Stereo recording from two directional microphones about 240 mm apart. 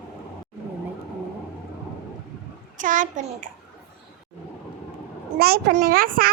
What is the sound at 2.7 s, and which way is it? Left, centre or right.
Speech, right.